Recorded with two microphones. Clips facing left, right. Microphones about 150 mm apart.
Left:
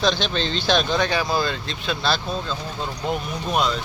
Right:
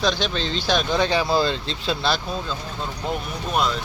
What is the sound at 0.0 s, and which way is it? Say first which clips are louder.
Speech: left 1 dB; 5° right (ahead or behind).